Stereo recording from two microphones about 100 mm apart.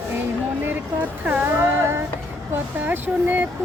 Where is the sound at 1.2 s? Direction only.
20° right (ahead or behind).